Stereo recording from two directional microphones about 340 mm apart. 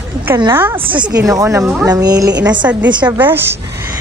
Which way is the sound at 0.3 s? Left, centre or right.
Centre.